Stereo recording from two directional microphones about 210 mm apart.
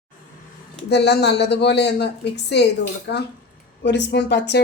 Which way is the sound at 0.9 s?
55° left (ahead or behind).